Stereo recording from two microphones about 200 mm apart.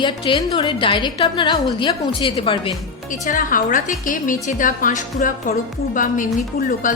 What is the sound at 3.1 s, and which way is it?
Speech, 40° left (ahead or behind).